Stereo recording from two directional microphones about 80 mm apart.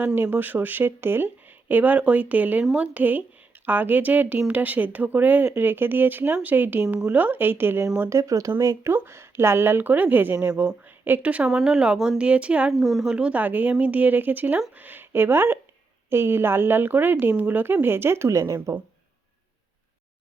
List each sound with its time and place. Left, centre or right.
0.0 s speech: right
8.2 s speech: right
10.3 s a woman's voice: centre
11.4 s a woman's voice: centre
12.7 s speech: centre
13.1 s speech: centre; by 18.8 s right